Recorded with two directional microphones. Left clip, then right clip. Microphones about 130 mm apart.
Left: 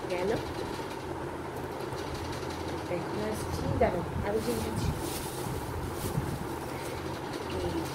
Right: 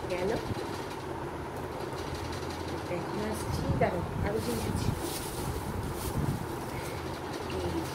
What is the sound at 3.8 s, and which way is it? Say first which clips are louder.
Speech: left 2 dB; 20° right (ahead or behind).